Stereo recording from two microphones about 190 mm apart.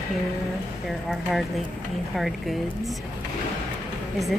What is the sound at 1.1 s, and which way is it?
Speech, centre (ahead or behind).